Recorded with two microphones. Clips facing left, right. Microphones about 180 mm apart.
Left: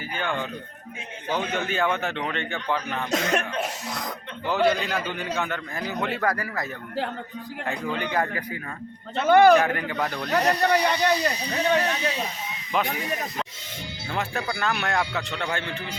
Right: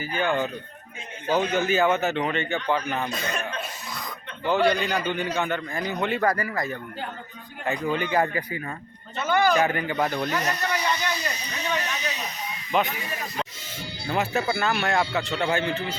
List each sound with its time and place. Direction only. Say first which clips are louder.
0.0 s a man's voice: right 4 dB; 5° right (ahead or behind)
3.1 s cough: left 5 dB; 80° left
4.4 s a man's voice: right 1 dB; centre (ahead or behind)
9.1 s speech: left 6 dB; 60° left (ahead or behind)
9.6 s a man's voice: right 2 dB; centre (ahead or behind)
10.2 s speech: left 5 dB; 35° left (ahead or behind)
12.7 s a man's voice: right 2 dB; centre (ahead or behind)
14.1 s a man's voice: right 4 dB; 5° right (ahead or behind)